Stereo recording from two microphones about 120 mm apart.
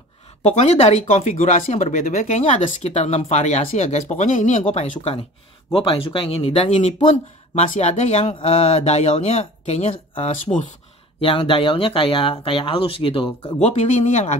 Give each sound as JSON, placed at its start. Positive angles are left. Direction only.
{"t": 0.5, "sound": "speech", "side_deg": 70}
{"t": 2.6, "sound": "speech", "side_deg": 60}
{"t": 4.6, "sound": "speech", "side_deg": 75}
{"t": 5.7, "sound": "speech", "side_deg": 45}
{"t": 7.5, "sound": "speech", "side_deg": 80}
{"t": 11.1, "sound": "speech", "side_deg": 50}
{"t": 13.6, "sound": "speech", "side_deg": 70}